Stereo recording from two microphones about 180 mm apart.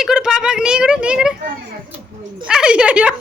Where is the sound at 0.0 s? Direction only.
5° right (ahead or behind).